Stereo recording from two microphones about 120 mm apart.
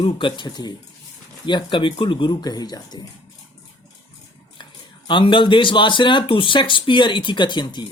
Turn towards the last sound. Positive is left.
turn(degrees=40)  # may be behind; listen again after turning